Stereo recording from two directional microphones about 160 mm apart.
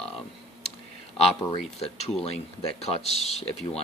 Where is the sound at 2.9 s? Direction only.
40° left (ahead or behind).